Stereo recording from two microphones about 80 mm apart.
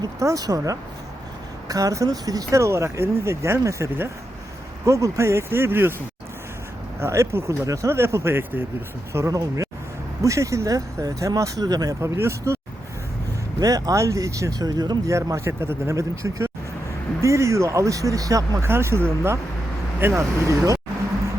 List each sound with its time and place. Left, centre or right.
0.0 s speech: right
4.9 s speech: right
7.0 s speech: right
13.6 s speech: right
15.1 s speech: right
18.7 s speech: right